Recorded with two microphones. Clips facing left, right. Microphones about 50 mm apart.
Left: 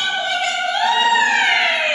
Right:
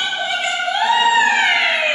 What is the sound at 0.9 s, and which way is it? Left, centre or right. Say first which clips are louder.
Emergency vehicle: right 2 dB; centre.